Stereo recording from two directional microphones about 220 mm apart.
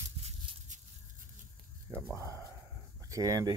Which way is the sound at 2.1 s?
10° right (ahead or behind).